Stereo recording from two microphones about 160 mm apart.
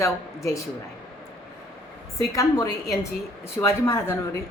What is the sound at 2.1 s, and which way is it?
A woman's voice, 20° left (ahead or behind).